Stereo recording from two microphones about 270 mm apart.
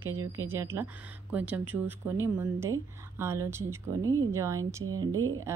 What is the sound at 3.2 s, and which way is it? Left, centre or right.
Speech, centre.